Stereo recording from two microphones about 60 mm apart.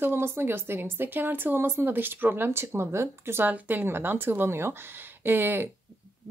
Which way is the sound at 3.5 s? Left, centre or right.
Right.